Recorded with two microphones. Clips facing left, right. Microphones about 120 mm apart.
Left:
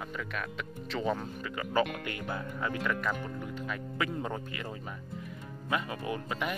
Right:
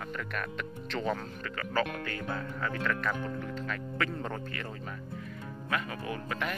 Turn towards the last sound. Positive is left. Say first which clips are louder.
# left 1 dB
turn(degrees=15)  # may be behind; listen again after turning